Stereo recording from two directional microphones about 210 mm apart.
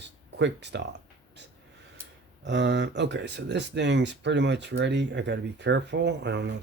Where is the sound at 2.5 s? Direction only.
55° right (ahead or behind).